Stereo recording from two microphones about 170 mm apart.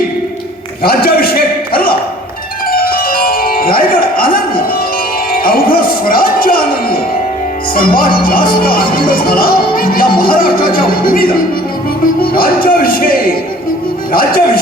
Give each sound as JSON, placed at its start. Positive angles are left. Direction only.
{"t": 0.8, "sound": "a sound", "side_deg": 65}
{"t": 2.6, "sound": "music", "side_deg": 60}
{"t": 5.3, "sound": "music", "side_deg": 60}
{"t": 7.8, "sound": "speech", "side_deg": 60}